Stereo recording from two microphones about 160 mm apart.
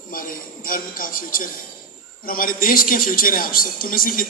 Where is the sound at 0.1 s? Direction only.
65° left (ahead or behind).